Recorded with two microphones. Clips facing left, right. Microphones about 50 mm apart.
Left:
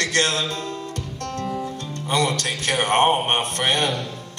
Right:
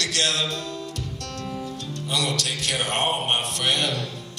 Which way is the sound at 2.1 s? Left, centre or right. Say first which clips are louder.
Left 5 dB; left.